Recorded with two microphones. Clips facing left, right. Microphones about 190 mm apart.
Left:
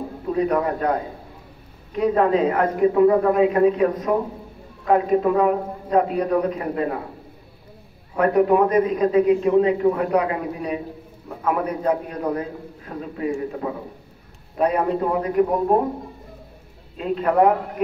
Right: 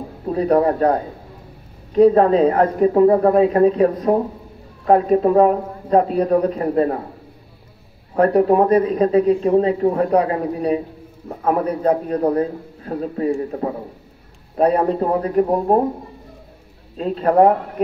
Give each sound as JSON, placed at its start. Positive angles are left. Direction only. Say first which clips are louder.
{"t": 0.3, "sound": "a man's voice", "louder": "right 5 dB", "side_deg": -35}
{"t": 8.2, "sound": "a man's voice", "louder": "right 3 dB", "side_deg": -35}
{"t": 16.9, "sound": "a man's voice", "louder": "right 4 dB", "side_deg": -35}